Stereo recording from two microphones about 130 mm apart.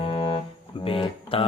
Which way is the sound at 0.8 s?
45° left (ahead or behind).